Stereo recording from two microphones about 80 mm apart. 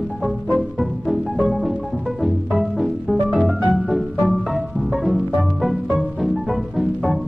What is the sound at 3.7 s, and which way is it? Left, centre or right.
Music, centre.